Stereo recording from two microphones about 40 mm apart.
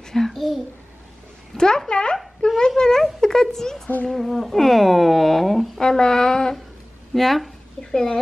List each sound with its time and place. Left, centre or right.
0.1 s a child's voice: centre
1.6 s speech: centre
5.8 s speech: centre
7.2 s speech: centre
7.8 s speech: centre